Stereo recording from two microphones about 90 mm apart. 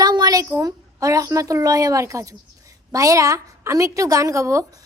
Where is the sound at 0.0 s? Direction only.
50° right (ahead or behind).